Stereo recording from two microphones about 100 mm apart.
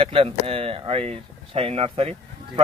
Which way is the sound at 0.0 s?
70° right (ahead or behind).